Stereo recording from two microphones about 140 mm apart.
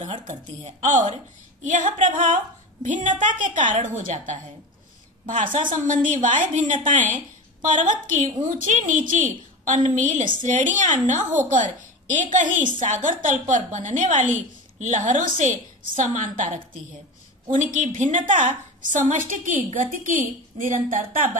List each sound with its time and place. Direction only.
0.2 s a woman's voice: 55° right (ahead or behind)